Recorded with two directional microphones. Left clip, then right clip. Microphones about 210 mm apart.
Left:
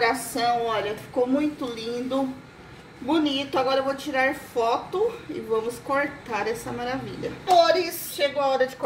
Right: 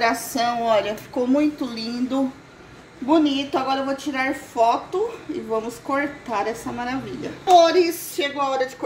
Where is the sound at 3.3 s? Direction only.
25° right (ahead or behind).